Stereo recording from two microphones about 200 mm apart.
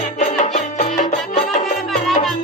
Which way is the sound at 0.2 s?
35° left (ahead or behind).